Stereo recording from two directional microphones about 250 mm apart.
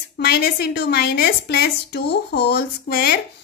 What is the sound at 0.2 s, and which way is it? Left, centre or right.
A woman's voice, left.